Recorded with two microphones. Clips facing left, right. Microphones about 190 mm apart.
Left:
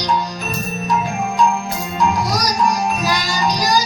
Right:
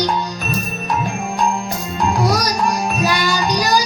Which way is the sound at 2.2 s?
60° right (ahead or behind).